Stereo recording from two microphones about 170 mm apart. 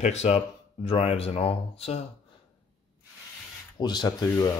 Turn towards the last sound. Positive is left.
turn(degrees=25)  # may be behind; listen again after turning